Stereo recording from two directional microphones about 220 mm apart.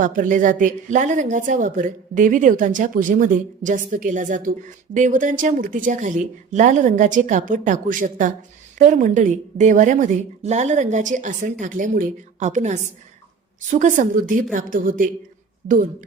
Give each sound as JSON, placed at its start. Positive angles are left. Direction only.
{"t": 0.0, "sound": "a woman's voice", "side_deg": -35}